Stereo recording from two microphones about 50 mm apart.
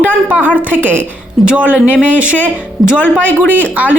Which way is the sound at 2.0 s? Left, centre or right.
Right.